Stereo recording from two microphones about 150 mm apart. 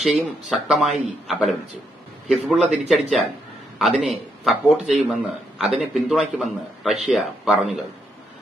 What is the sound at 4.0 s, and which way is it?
Speech, centre (ahead or behind).